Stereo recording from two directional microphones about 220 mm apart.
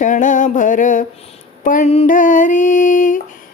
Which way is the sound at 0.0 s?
35° left (ahead or behind).